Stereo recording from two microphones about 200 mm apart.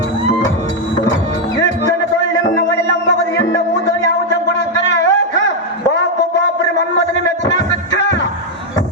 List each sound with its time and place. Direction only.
2.4 s music: 60° left (ahead or behind)
7.4 s music: 60° left (ahead or behind)